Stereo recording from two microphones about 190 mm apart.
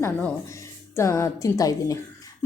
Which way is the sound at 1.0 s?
15° left (ahead or behind).